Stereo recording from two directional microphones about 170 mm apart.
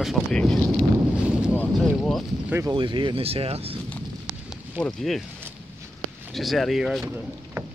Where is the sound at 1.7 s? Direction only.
Centre (ahead or behind).